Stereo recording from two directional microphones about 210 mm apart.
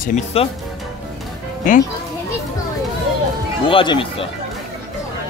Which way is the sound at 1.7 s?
35° left (ahead or behind).